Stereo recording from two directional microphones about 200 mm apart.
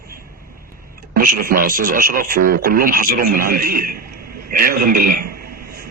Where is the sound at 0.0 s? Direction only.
45° right (ahead or behind).